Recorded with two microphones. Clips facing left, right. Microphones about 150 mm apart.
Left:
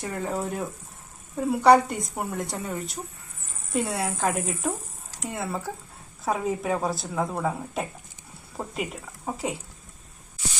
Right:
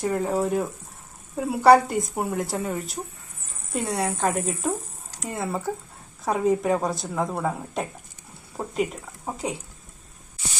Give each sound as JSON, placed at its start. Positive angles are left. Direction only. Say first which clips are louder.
{"t": 0.0, "sound": "a woman's voice", "louder": "right 6 dB", "side_deg": -5}
{"t": 0.3, "sound": "speech", "louder": "right 6 dB", "side_deg": -35}
{"t": 1.4, "sound": "a woman's voice", "louder": "right 2 dB", "side_deg": -5}